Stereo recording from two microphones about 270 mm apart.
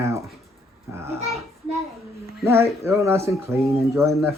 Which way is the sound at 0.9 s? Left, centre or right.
Centre.